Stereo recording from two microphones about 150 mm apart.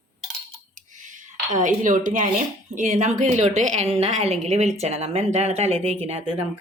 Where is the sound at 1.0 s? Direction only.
55° right (ahead or behind).